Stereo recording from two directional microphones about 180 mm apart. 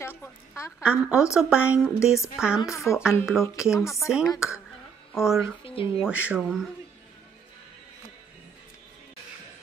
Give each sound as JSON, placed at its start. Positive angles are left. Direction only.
{"t": 0.0, "sound": "a woman's voice", "side_deg": 10}
{"t": 0.8, "sound": "speech", "side_deg": -5}
{"t": 2.9, "sound": "speech", "side_deg": 15}
{"t": 3.3, "sound": "speech", "side_deg": 0}
{"t": 3.8, "sound": "speech", "side_deg": 15}
{"t": 5.1, "sound": "speech", "side_deg": 0}
{"t": 5.4, "sound": "speech", "side_deg": 30}
{"t": 5.9, "sound": "speech", "side_deg": -5}